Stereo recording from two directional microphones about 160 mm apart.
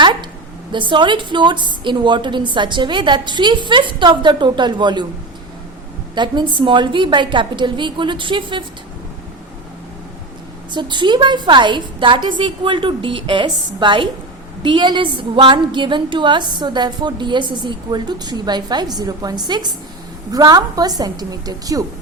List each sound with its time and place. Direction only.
0.0 s a sound: 30° right (ahead or behind)
0.7 s a woman's voice: 30° right (ahead or behind)
6.1 s a woman's voice: 30° right (ahead or behind)
10.7 s a woman's voice: 30° right (ahead or behind)